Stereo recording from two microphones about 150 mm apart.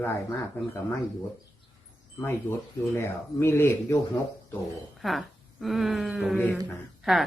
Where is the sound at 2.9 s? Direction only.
15° left (ahead or behind).